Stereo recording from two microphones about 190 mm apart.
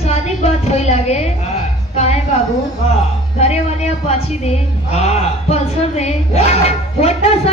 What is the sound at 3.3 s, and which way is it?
Speech, 35° left (ahead or behind).